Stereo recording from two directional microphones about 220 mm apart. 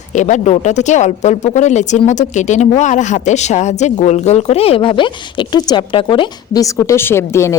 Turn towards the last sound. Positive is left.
turn(degrees=10)  # may be behind; listen again after turning